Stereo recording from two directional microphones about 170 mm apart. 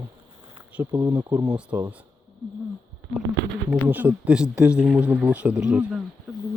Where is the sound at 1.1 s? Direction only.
10° right (ahead or behind).